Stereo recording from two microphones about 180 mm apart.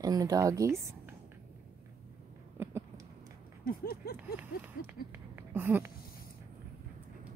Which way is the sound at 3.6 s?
60° left (ahead or behind).